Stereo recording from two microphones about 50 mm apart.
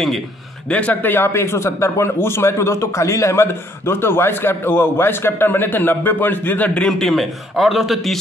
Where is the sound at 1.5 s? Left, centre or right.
Left.